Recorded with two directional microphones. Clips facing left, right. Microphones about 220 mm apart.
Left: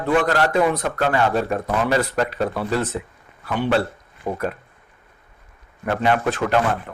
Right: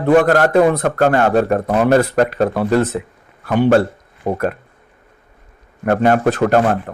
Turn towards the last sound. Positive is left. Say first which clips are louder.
# right 6 dB
turn(degrees=-45)  # may be behind; listen again after turning